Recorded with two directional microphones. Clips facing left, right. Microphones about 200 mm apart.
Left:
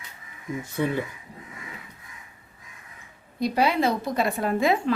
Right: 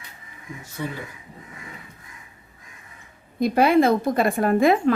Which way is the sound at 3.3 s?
50° right (ahead or behind).